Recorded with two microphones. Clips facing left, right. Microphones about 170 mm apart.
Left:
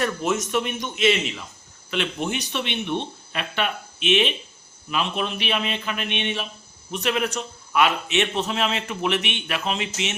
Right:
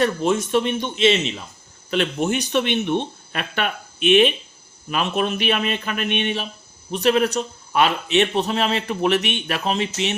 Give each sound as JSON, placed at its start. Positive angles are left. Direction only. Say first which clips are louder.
{"t": 0.0, "sound": "a man's voice", "louder": "right 4 dB", "side_deg": -30}
{"t": 1.9, "sound": "a man's voice", "louder": "right 5 dB", "side_deg": -45}